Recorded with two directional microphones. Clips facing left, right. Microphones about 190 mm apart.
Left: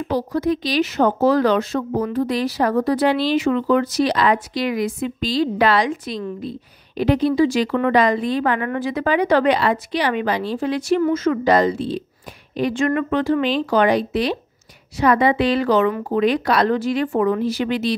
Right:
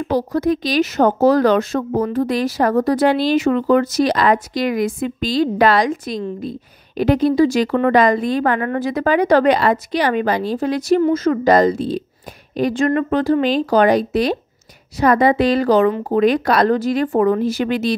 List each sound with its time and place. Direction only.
0.1 s a woman's voice: 45° right (ahead or behind)